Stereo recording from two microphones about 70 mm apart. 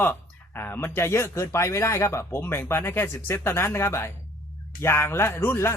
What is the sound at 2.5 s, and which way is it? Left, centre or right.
Speech, left.